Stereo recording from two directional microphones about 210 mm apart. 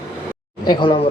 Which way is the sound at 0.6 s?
20° left (ahead or behind).